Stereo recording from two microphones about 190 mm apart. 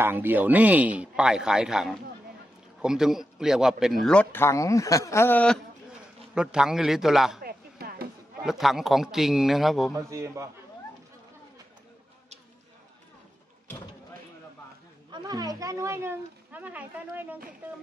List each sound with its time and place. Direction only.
0.0 s a man's voice: 10° right (ahead or behind); by 5.6 s 10° left (ahead or behind)
6.3 s a man's voice: 5° right (ahead or behind)
7.4 s a sound: 55° right (ahead or behind)
8.4 s a man's voice: centre (ahead or behind)
9.9 s a man's voice: 15° right (ahead or behind)
15.0 s a woman's voice: 20° right (ahead or behind)